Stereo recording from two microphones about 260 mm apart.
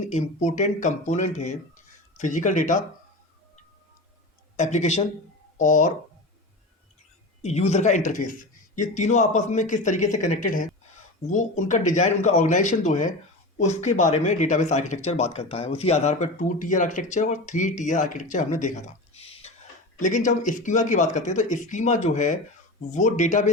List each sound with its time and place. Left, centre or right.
0.0 s speech: left
4.5 s speech: left
7.4 s speech: left